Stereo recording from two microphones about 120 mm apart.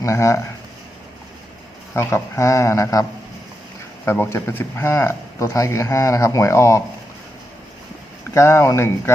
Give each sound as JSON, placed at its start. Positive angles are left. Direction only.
{"t": 0.0, "sound": "a man's voice", "side_deg": 25}
{"t": 1.9, "sound": "a man's voice", "side_deg": 20}
{"t": 8.3, "sound": "a man's voice", "side_deg": 25}